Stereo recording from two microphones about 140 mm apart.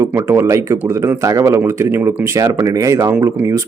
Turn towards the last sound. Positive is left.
turn(degrees=-20)  # may be behind; listen again after turning